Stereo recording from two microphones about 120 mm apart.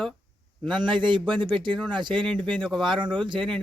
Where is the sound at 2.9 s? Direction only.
40° right (ahead or behind).